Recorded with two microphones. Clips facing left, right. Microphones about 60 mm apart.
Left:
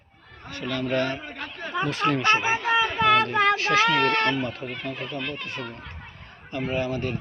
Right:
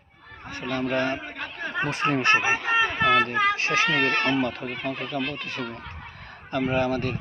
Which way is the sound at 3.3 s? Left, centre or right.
Left.